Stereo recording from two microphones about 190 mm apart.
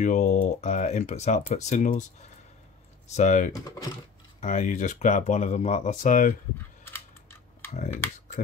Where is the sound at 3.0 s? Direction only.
40° left (ahead or behind).